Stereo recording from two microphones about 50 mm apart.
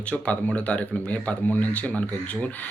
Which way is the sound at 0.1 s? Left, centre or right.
Left.